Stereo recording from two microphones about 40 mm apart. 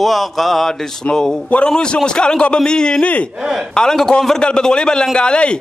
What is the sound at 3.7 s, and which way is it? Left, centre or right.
Speech, centre.